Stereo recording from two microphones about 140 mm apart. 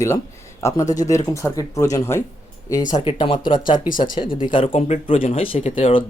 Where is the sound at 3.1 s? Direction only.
35° left (ahead or behind).